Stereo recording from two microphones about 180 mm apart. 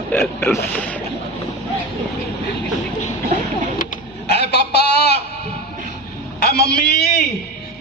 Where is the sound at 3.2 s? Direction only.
45° right (ahead or behind).